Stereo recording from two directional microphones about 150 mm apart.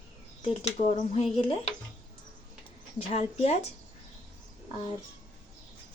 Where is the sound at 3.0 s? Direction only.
40° left (ahead or behind).